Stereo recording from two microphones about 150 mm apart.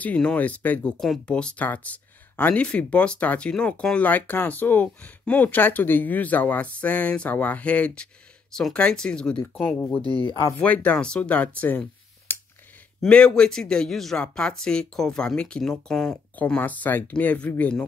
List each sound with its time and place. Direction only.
0.0 s speech: 10° left (ahead or behind)
9.9 s speech: 35° left (ahead or behind)
10.6 s speech: 10° left (ahead or behind)
12.3 s a sound: 15° left (ahead or behind)
13.0 s speech: 5° left (ahead or behind)